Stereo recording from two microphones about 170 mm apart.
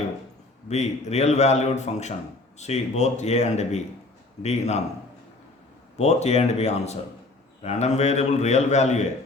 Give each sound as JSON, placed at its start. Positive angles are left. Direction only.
{"t": 0.7, "sound": "a man's voice", "side_deg": 40}
{"t": 6.0, "sound": "a man's voice", "side_deg": 40}